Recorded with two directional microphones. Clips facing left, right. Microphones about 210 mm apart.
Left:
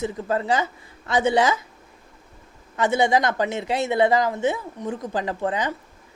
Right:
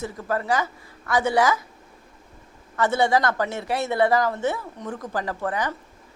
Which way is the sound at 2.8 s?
15° left (ahead or behind).